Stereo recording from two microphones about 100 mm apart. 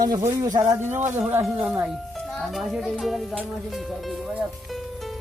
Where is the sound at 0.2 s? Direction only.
30° right (ahead or behind).